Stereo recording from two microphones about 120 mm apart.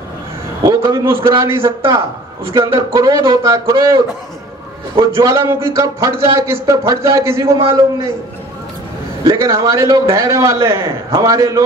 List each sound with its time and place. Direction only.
0.7 s a man's voice: 25° right (ahead or behind)
5.0 s speech: 25° right (ahead or behind)
9.2 s speech: 25° right (ahead or behind)